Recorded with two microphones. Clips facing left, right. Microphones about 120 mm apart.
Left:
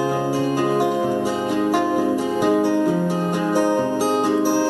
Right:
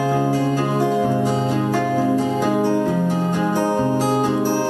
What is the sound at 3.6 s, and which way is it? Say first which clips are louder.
Music: even; 20° right (ahead or behind).